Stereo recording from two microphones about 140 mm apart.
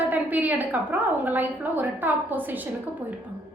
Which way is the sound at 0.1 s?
10° right (ahead or behind).